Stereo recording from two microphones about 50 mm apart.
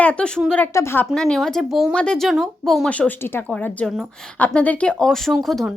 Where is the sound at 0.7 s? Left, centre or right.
Left.